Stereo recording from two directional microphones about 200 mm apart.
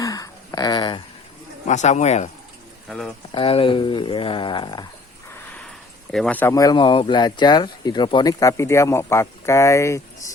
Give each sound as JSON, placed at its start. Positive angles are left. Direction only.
{"t": 0.0, "sound": "a sound", "side_deg": 15}
{"t": 1.6, "sound": "speech", "side_deg": 35}
{"t": 3.3, "sound": "speech", "side_deg": 25}
{"t": 5.5, "sound": "speech", "side_deg": 5}